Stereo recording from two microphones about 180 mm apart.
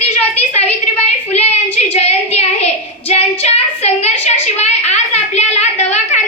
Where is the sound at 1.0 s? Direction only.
35° left (ahead or behind).